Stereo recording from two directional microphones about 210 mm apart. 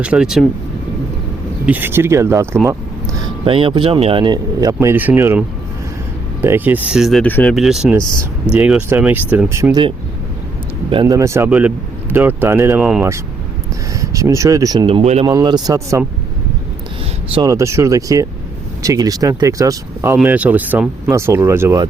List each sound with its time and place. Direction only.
0.0 s speech: 5° right (ahead or behind)
1.6 s speech: 10° right (ahead or behind)
3.4 s speech: 25° right (ahead or behind); by 7.9 s centre (ahead or behind)
7.9 s speech: 15° right (ahead or behind)
15.3 s speech: 20° right (ahead or behind)
17.3 s speech: 15° right (ahead or behind)